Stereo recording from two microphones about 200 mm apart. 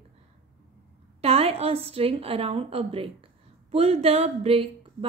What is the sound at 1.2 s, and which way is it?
A woman's voice, 30° right (ahead or behind).